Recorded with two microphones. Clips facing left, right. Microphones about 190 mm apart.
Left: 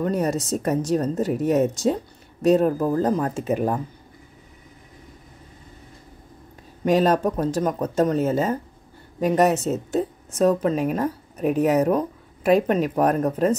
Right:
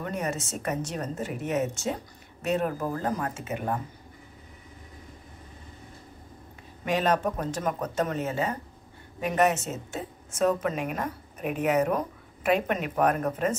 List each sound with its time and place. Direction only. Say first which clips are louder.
0.1 s a woman's voice: left 8 dB; 40° left (ahead or behind)
6.8 s a woman's voice: left 7 dB; 40° left (ahead or behind)